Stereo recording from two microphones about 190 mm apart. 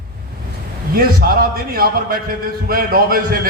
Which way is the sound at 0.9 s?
50° right (ahead or behind).